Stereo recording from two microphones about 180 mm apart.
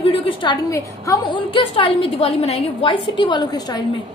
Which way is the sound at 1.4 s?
30° left (ahead or behind).